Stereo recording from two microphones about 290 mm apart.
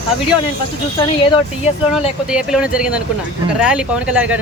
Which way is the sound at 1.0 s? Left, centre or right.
Centre.